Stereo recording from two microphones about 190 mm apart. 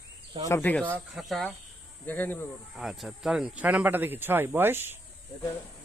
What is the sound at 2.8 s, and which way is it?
Speech, centre (ahead or behind).